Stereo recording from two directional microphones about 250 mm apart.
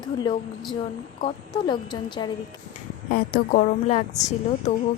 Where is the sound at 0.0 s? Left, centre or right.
Centre.